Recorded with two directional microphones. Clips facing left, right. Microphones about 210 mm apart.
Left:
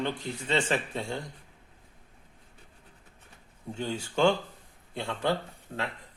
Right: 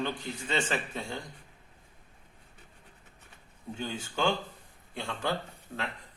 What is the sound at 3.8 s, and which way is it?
A man's voice, 30° left (ahead or behind).